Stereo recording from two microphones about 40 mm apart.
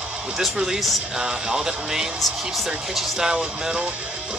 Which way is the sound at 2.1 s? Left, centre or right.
Centre.